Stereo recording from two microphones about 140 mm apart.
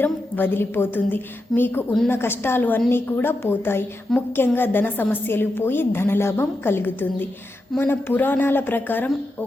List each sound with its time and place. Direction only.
0.0 s a woman's voice: 15° left (ahead or behind)